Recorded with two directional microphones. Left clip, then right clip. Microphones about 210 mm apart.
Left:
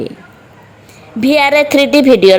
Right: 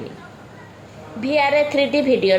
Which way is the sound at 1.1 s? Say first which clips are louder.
Left 7 dB; 50° left (ahead or behind).